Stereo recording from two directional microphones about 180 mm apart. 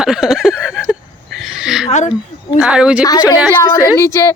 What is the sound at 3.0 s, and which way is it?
A woman's voice, 20° left (ahead or behind).